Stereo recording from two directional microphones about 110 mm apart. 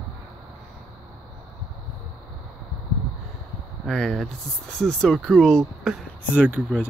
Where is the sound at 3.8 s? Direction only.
5° left (ahead or behind).